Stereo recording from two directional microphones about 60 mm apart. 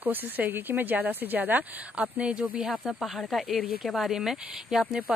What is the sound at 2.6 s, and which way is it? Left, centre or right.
Speech, centre.